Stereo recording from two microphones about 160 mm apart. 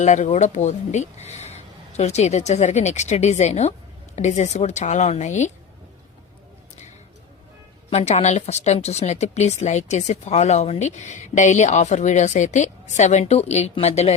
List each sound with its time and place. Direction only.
0.0 s speech: 45° left (ahead or behind)
7.9 s speech: 40° left (ahead or behind)